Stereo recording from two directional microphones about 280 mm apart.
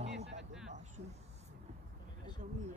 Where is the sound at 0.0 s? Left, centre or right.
Right.